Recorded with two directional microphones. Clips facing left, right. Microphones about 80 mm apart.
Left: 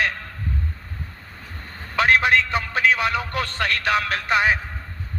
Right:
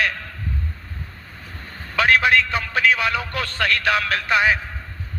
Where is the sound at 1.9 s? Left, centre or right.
Left.